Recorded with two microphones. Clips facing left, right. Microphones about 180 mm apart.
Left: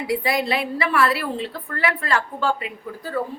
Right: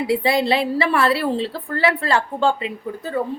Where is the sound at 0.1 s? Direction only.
25° right (ahead or behind).